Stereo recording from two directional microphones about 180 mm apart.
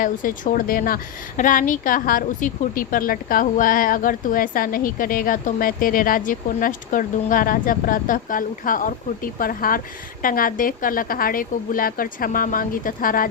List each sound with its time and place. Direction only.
0.0 s a woman's voice: 50° left (ahead or behind)